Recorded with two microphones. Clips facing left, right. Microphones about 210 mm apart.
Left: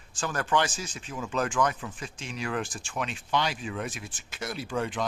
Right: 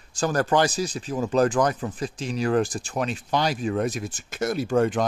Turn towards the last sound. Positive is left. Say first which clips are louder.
# right 9 dB
turn(degrees=-45)  # may be behind; listen again after turning